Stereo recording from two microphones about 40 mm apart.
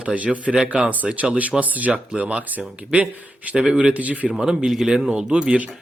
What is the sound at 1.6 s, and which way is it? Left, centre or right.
Speech, right.